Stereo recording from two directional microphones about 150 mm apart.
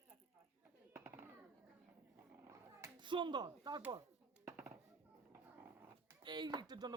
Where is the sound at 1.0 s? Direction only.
15° right (ahead or behind).